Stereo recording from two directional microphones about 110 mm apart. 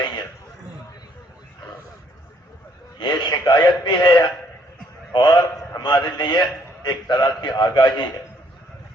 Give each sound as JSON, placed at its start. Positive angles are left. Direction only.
{"t": 3.0, "sound": "a man's voice", "side_deg": 40}